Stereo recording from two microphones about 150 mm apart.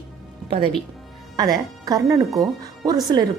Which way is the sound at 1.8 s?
25° right (ahead or behind).